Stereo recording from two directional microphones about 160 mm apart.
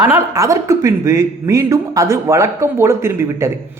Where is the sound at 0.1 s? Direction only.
20° right (ahead or behind).